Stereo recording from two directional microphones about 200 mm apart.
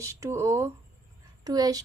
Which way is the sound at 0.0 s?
15° right (ahead or behind).